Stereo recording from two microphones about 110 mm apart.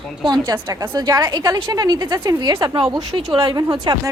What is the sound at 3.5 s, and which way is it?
Speech, 40° right (ahead or behind).